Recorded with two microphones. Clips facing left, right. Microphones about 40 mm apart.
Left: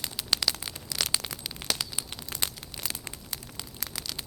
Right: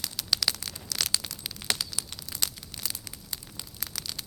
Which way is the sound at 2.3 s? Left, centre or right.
Left.